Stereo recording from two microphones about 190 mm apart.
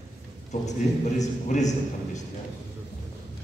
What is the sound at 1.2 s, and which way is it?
Speech, 40° left (ahead or behind).